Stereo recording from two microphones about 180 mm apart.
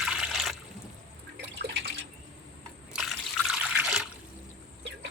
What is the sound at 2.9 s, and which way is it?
Water, centre (ahead or behind).